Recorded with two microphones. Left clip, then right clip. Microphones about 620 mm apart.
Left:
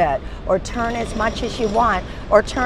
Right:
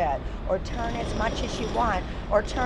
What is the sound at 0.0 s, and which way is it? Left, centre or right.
Vehicle, left.